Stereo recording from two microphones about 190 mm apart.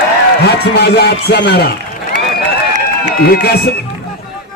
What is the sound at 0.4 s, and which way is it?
Speech, 60° left (ahead or behind).